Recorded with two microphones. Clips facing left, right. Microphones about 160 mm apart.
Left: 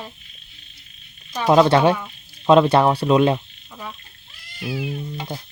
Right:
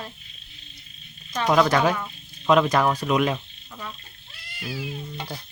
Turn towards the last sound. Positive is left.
turn(degrees=20)  # may be behind; listen again after turning